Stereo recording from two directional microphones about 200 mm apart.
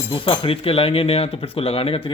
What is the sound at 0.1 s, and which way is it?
Speech, 30° left (ahead or behind).